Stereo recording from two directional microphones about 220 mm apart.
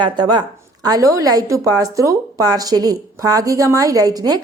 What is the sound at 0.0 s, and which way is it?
A woman's voice, 20° right (ahead or behind).